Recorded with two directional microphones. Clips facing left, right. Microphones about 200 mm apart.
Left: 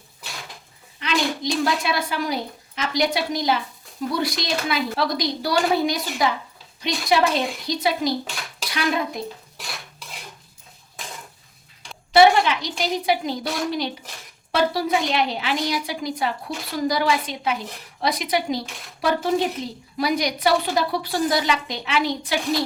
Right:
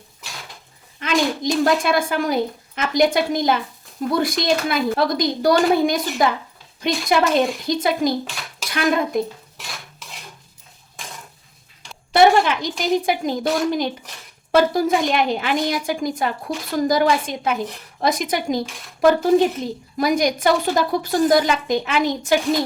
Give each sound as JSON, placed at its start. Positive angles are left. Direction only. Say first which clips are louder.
{"t": 0.9, "sound": "a woman's voice", "louder": "right 4 dB", "side_deg": -50}
{"t": 12.1, "sound": "a woman's voice", "louder": "right 1 dB", "side_deg": -50}